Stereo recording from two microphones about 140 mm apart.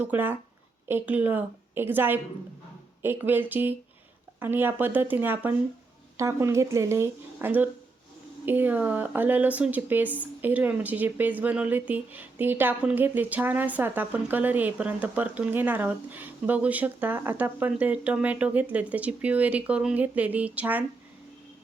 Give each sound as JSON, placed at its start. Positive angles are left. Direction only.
{"t": 0.0, "sound": "speech", "side_deg": -15}